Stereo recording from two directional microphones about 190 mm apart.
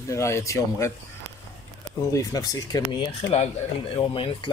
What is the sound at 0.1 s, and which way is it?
Speech, 15° left (ahead or behind).